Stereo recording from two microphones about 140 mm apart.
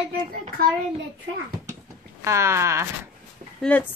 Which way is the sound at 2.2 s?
20° right (ahead or behind).